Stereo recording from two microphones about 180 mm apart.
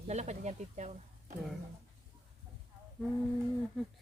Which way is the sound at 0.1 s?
40° right (ahead or behind).